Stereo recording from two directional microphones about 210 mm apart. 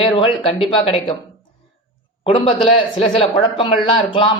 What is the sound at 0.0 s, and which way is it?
Speech, 25° left (ahead or behind).